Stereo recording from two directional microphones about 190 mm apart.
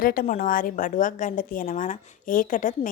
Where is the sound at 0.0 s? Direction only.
50° left (ahead or behind).